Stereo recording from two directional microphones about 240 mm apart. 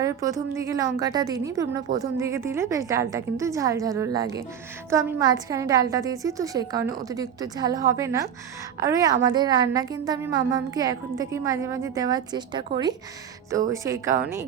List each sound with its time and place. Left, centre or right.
0.0 s a woman's voice: centre